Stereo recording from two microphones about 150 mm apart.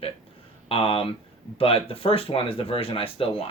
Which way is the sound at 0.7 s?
40° left (ahead or behind).